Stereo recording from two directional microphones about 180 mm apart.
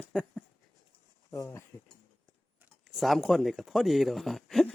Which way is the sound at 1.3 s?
15° left (ahead or behind).